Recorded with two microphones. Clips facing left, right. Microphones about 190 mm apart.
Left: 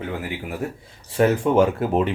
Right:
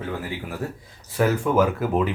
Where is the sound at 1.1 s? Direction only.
30° left (ahead or behind).